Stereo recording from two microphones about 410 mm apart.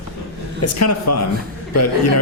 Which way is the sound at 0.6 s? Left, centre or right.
Left.